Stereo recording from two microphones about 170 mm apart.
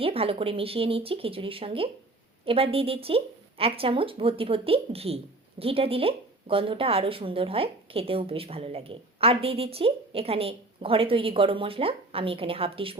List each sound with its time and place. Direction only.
0.0 s speech: 35° right (ahead or behind)